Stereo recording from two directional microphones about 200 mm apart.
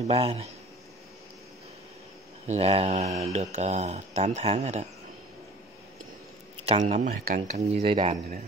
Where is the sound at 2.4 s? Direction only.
30° right (ahead or behind).